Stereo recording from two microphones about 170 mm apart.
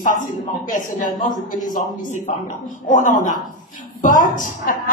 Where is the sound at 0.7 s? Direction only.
55° left (ahead or behind).